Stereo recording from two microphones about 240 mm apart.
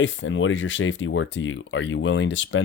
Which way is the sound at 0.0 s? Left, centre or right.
Left.